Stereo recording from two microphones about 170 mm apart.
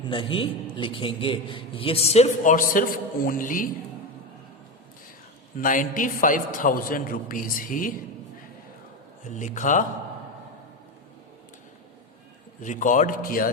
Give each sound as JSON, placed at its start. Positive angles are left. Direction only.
{"t": 0.1, "sound": "a man's voice", "side_deg": 30}
{"t": 5.5, "sound": "a man's voice", "side_deg": 55}
{"t": 9.2, "sound": "a man's voice", "side_deg": 45}
{"t": 12.6, "sound": "a man's voice", "side_deg": 50}